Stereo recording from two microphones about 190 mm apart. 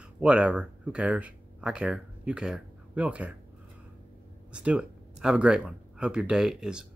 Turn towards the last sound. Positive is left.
turn(degrees=-5)  # may be behind; listen again after turning